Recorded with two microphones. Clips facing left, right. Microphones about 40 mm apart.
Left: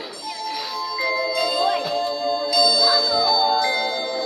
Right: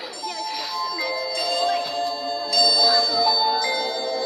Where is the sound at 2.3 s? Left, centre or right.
Left.